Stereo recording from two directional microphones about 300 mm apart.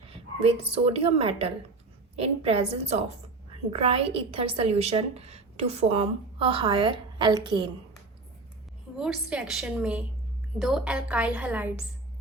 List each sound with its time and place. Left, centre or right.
0.3 s a woman's voice: centre
9.0 s a woman's voice: centre